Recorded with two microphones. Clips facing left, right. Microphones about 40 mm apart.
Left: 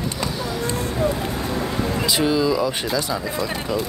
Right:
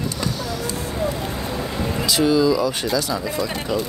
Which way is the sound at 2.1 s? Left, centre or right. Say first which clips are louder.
Right 3 dB; centre.